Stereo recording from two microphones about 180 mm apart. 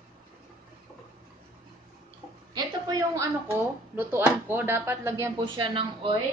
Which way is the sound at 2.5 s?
20° right (ahead or behind).